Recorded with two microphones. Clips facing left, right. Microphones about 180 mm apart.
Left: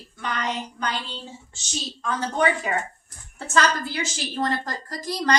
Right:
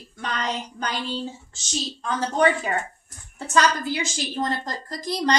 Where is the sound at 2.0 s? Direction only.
35° right (ahead or behind).